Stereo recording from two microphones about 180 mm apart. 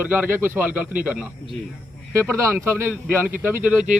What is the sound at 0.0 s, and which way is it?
Speech, 10° right (ahead or behind).